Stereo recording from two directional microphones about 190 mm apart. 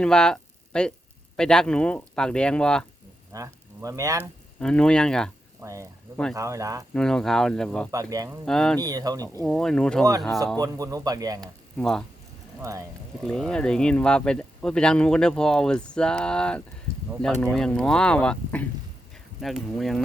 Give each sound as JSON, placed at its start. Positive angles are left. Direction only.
{"t": 0.0, "sound": "speech", "side_deg": 5}
{"t": 3.3, "sound": "speech", "side_deg": -15}
{"t": 4.2, "sound": "speech", "side_deg": 5}
{"t": 5.6, "sound": "speech", "side_deg": -15}
{"t": 6.9, "sound": "speech", "side_deg": 5}
{"t": 8.1, "sound": "speech", "side_deg": -20}
{"t": 8.4, "sound": "speech", "side_deg": 5}
{"t": 8.8, "sound": "speech", "side_deg": -20}
{"t": 9.4, "sound": "speech", "side_deg": 5}
{"t": 10.6, "sound": "speech", "side_deg": -20}
{"t": 11.3, "sound": "speech", "side_deg": 5}
{"t": 13.2, "sound": "speech", "side_deg": 5}